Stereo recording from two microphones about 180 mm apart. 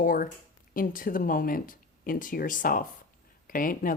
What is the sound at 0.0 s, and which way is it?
A woman's voice, 50° left (ahead or behind).